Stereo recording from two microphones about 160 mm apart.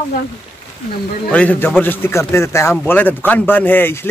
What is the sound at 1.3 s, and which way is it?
Speech, 10° left (ahead or behind).